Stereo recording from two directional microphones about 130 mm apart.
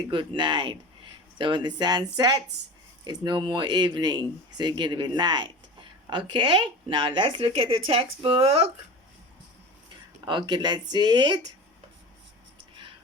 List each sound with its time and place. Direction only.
0.1 s speech: 40° right (ahead or behind)
10.2 s speech: 35° right (ahead or behind)